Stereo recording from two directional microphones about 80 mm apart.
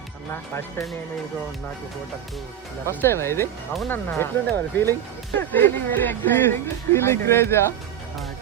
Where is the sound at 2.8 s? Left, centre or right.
Left.